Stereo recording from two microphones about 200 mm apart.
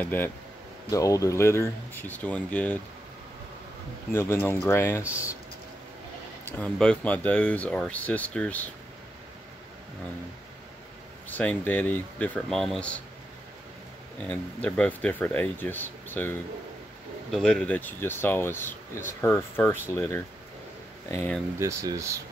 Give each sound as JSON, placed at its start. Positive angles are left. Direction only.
{"t": 0.0, "sound": "speech", "side_deg": 10}
{"t": 4.1, "sound": "speech", "side_deg": 10}
{"t": 5.0, "sound": "speech", "side_deg": -5}
{"t": 6.4, "sound": "speech", "side_deg": 5}
{"t": 11.2, "sound": "speech", "side_deg": 10}
{"t": 14.2, "sound": "speech", "side_deg": 5}
{"t": 21.5, "sound": "speech", "side_deg": -15}